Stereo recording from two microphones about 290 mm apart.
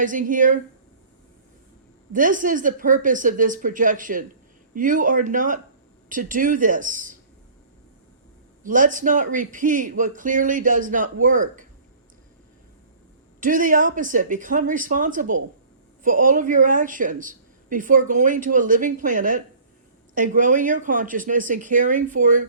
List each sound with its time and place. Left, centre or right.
0.0 s a woman's voice: right
2.1 s a woman's voice: right
8.6 s a woman's voice: right
13.4 s a woman's voice: right